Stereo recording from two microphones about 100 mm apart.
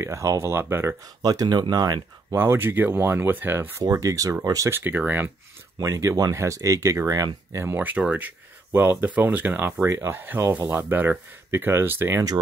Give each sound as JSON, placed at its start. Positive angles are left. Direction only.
{"t": 0.0, "sound": "speech", "side_deg": -30}
{"t": 1.2, "sound": "speech", "side_deg": -40}
{"t": 2.3, "sound": "speech", "side_deg": -25}
{"t": 3.8, "sound": "speech", "side_deg": -35}
{"t": 4.6, "sound": "speech", "side_deg": -20}
{"t": 5.8, "sound": "speech", "side_deg": -30}
{"t": 7.5, "sound": "speech", "side_deg": -20}